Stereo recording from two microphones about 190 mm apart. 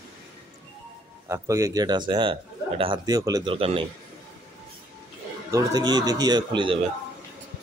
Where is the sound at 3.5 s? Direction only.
30° right (ahead or behind).